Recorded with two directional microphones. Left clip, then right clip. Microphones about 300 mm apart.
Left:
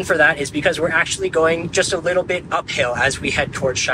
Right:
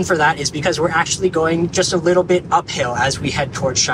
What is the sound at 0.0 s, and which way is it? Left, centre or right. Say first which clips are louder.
Speech: even; centre.